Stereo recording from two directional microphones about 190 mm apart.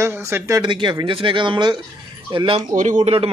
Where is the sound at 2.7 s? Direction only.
40° right (ahead or behind).